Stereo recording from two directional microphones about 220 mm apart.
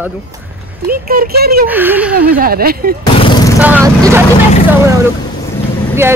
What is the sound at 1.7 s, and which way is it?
Speech, 10° right (ahead or behind).